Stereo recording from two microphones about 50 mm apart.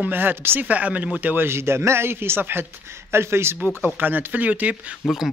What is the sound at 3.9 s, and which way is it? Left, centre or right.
Speech, right.